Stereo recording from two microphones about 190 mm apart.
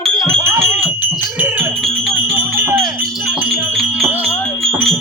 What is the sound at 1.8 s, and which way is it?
Music, centre (ahead or behind).